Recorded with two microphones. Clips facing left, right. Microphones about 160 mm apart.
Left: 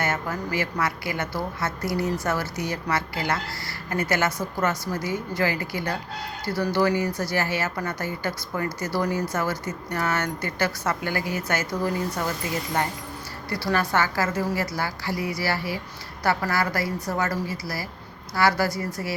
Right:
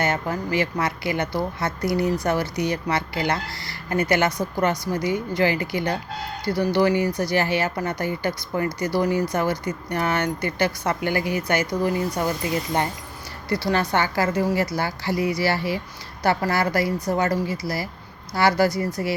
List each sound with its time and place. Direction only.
0.0 s a woman's voice: 20° right (ahead or behind)
13.5 s a woman's voice: 20° right (ahead or behind)